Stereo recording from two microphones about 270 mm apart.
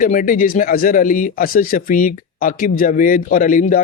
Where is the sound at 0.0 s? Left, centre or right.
Left.